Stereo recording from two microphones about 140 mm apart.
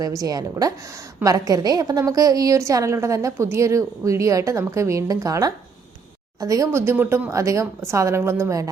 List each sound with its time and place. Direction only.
0.0 s a woman's voice: 25° right (ahead or behind)